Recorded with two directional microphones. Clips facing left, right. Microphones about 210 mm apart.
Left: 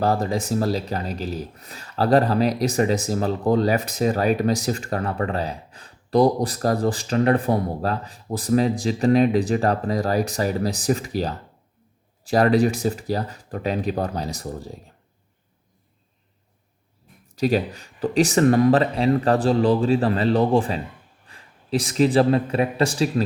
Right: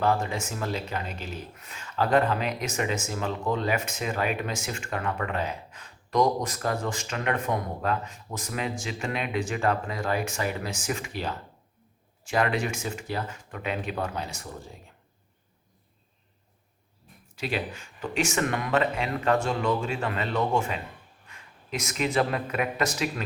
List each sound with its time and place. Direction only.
0.0 s speech: 35° left (ahead or behind)
17.2 s speech: 40° left (ahead or behind)